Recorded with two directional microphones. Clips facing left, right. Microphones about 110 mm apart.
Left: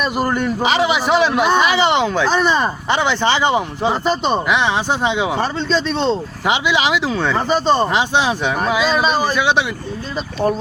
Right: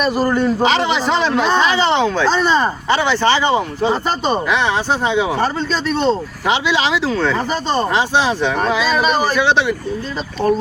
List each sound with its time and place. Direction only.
0.2 s a man's voice: 10° left (ahead or behind)
6.5 s a man's voice: 15° left (ahead or behind)